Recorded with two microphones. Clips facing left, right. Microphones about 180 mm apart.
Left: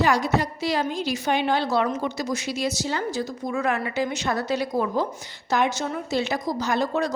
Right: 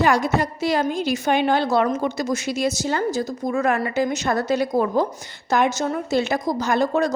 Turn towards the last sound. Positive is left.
turn(degrees=-45)  # may be behind; listen again after turning